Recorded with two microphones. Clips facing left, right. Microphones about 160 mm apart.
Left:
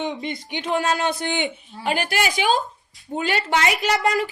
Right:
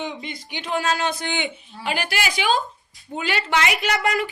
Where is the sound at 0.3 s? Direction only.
20° left (ahead or behind).